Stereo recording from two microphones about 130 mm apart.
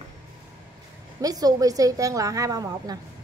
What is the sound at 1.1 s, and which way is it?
A woman's voice, 30° right (ahead or behind).